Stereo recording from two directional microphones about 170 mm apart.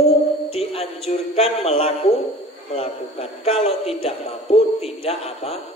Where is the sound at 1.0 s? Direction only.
35° left (ahead or behind).